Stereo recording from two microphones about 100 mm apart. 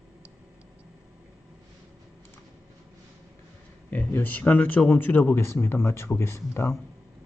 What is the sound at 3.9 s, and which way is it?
Speech, 20° left (ahead or behind).